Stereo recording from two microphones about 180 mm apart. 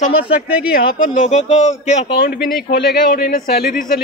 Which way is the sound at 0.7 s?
50° left (ahead or behind).